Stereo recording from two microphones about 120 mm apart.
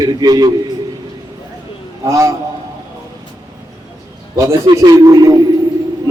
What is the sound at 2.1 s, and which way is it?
Speech, 25° right (ahead or behind).